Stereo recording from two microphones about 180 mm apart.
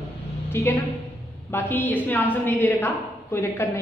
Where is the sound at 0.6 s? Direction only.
15° left (ahead or behind).